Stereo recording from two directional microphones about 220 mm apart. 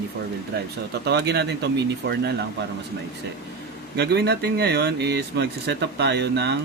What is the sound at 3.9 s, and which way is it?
Speech, 50° right (ahead or behind).